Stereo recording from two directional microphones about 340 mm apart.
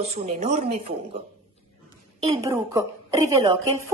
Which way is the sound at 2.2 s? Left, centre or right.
Centre.